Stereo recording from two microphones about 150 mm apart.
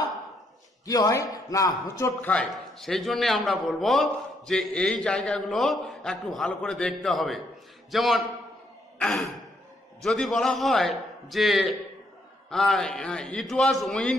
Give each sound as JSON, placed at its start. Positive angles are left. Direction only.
{"t": 0.8, "sound": "speech", "side_deg": 25}
{"t": 2.2, "sound": "a man's voice", "side_deg": 5}
{"t": 8.9, "sound": "sigh", "side_deg": 5}
{"t": 10.0, "sound": "a man's voice", "side_deg": 0}